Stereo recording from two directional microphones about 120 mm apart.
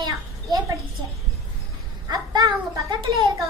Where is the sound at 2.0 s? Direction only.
30° right (ahead or behind).